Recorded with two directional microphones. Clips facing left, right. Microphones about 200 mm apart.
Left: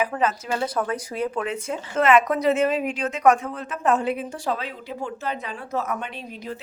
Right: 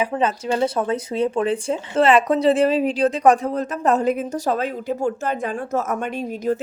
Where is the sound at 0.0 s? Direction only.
30° right (ahead or behind).